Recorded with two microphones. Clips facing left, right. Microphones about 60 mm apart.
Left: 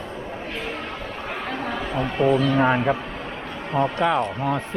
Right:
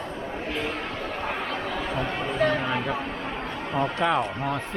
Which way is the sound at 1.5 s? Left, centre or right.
Left.